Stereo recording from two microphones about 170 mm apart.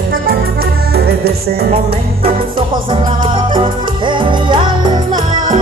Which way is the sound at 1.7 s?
35° right (ahead or behind).